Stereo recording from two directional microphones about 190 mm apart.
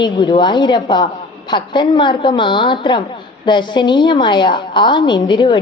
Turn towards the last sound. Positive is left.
turn(degrees=25)  # may be behind; listen again after turning